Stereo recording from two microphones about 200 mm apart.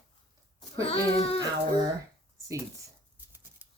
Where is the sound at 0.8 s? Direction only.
30° left (ahead or behind).